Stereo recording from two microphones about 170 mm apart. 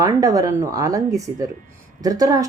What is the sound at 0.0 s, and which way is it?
Speech, 20° right (ahead or behind).